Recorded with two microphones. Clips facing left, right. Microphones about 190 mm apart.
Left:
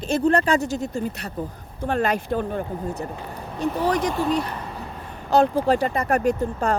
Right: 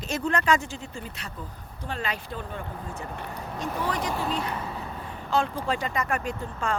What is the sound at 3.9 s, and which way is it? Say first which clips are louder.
Speech: left 7 dB; 5° right (ahead or behind).